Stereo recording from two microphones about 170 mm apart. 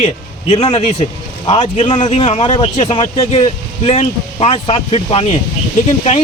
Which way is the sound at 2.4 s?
25° left (ahead or behind).